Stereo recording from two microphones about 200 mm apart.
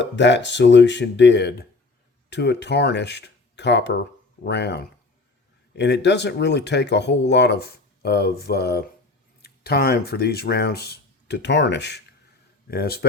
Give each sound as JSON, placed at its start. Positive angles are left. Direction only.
{"t": 0.0, "sound": "a man's voice", "side_deg": 60}